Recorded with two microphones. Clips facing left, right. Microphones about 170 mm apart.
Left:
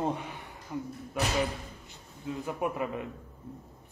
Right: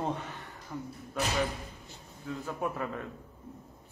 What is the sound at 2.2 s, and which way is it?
Speech, 15° left (ahead or behind).